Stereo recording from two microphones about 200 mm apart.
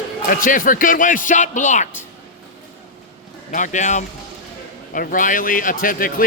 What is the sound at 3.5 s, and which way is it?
Speech, 40° left (ahead or behind).